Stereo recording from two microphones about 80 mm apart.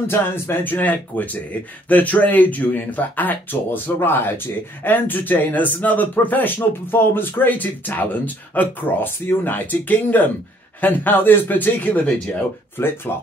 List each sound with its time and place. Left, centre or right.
0.0 s speech: left